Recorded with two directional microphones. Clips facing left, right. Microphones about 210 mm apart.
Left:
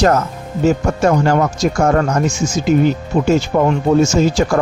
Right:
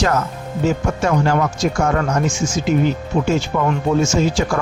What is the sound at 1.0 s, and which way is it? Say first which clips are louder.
Speech: left 4 dB; 40° left (ahead or behind).